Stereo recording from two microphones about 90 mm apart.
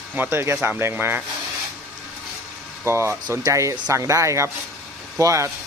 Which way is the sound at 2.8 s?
30° right (ahead or behind).